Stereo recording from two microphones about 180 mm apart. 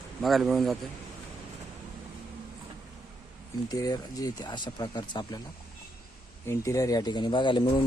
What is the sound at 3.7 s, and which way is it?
Speech, 20° left (ahead or behind).